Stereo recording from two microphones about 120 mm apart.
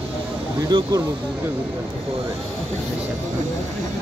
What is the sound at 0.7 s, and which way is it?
Speech, 40° right (ahead or behind).